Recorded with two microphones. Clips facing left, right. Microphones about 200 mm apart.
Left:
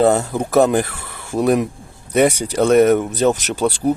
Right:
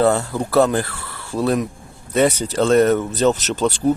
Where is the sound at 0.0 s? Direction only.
20° left (ahead or behind).